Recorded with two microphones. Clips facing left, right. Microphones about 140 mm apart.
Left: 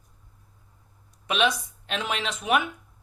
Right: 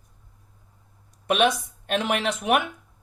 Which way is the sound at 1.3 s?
55° right (ahead or behind).